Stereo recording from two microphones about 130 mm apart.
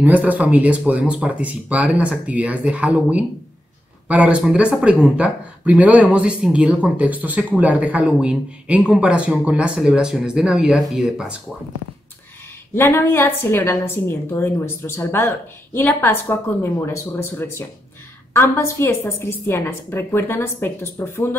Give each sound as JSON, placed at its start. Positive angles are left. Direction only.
{"t": 0.0, "sound": "speech", "side_deg": -10}
{"t": 12.7, "sound": "a woman's voice", "side_deg": 15}